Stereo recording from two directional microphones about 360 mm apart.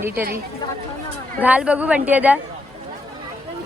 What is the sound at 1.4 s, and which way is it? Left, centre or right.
Speech, centre.